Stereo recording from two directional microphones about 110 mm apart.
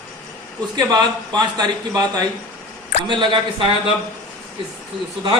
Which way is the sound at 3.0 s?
50° right (ahead or behind).